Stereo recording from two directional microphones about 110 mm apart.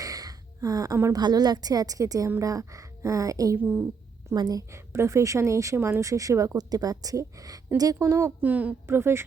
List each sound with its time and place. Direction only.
0.0 s gasp: 35° right (ahead or behind)
1.1 s a woman's voice: 40° right (ahead or behind)
8.0 s a woman's voice: 25° right (ahead or behind)